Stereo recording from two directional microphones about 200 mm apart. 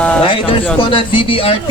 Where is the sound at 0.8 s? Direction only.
25° left (ahead or behind).